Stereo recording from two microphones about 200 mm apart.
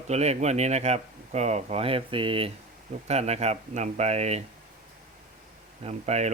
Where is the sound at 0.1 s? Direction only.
35° right (ahead or behind).